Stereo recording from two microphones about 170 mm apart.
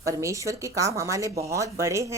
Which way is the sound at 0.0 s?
20° right (ahead or behind).